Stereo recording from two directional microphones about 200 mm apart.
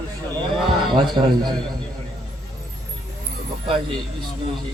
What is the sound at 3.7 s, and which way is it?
Speech, 25° right (ahead or behind).